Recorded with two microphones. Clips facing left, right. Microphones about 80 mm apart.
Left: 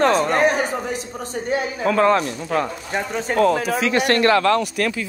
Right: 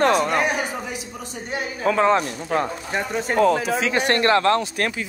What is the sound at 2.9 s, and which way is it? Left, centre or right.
Speech, centre.